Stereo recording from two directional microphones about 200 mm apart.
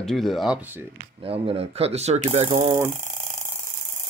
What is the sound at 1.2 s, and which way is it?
Speech, 30° right (ahead or behind).